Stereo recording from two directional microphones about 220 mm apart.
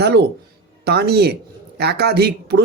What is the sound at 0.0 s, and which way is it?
A man's voice, 50° right (ahead or behind).